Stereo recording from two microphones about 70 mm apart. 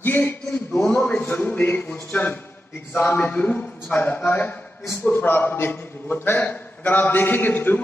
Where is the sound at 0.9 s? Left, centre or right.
Centre.